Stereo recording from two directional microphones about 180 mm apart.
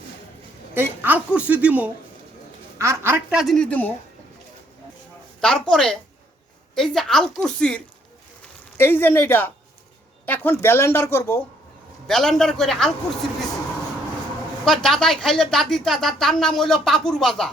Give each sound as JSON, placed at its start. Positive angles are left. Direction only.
{"t": 0.7, "sound": "a woman's voice", "side_deg": -10}
{"t": 5.4, "sound": "a woman's voice", "side_deg": 5}
{"t": 8.8, "sound": "speech", "side_deg": 10}
{"t": 12.0, "sound": "a woman's voice", "side_deg": 0}
{"t": 14.6, "sound": "a woman's voice", "side_deg": 5}